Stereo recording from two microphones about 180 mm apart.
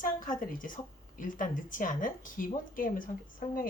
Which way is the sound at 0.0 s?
50° left (ahead or behind).